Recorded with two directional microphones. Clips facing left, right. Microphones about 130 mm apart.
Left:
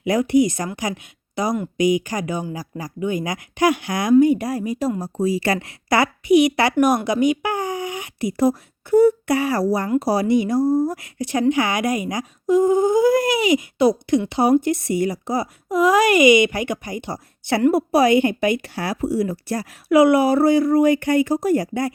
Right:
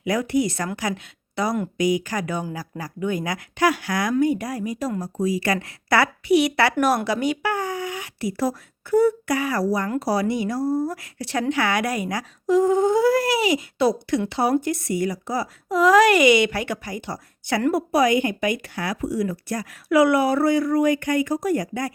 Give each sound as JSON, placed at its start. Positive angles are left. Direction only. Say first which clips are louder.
{"t": 0.0, "sound": "speech", "louder": "left 5 dB", "side_deg": 20}
{"t": 1.8, "sound": "speech", "louder": "left 4 dB", "side_deg": 20}
{"t": 5.5, "sound": "speech", "louder": "left 1 dB", "side_deg": 20}
{"t": 15.7, "sound": "speech", "louder": "even", "side_deg": 10}